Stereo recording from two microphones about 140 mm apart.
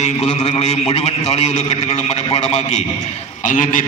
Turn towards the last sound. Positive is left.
turn(degrees=65)  # may be behind; listen again after turning